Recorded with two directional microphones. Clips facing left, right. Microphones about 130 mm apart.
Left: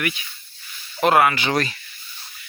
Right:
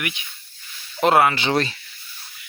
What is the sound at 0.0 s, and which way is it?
Speech, 20° right (ahead or behind).